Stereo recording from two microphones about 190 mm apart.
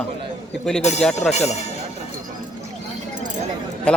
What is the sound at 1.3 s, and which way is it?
Speech, 35° left (ahead or behind).